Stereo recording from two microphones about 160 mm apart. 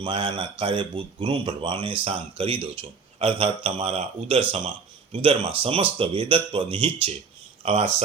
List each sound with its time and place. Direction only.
0.0 s a man's voice: 30° right (ahead or behind)